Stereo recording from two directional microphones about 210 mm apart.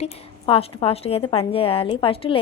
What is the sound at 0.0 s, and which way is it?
A woman's voice, 25° left (ahead or behind).